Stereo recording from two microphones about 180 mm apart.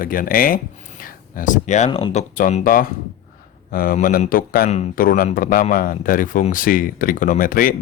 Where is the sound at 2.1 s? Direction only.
45° left (ahead or behind).